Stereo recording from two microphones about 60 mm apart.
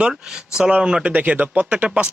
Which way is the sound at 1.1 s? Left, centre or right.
Right.